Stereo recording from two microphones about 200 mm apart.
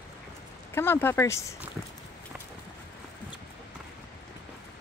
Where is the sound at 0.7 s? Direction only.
10° left (ahead or behind).